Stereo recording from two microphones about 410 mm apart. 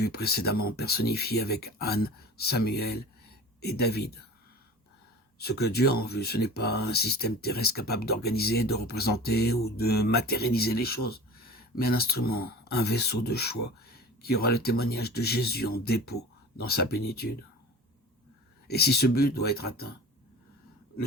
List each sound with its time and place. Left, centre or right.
0.0 s speech: left
5.4 s speech: left
18.7 s speech: left